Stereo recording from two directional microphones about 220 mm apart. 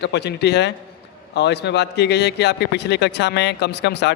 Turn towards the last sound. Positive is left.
turn(degrees=50)  # may be behind; listen again after turning